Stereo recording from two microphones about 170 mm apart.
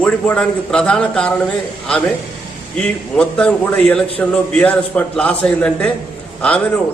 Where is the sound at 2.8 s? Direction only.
5° left (ahead or behind).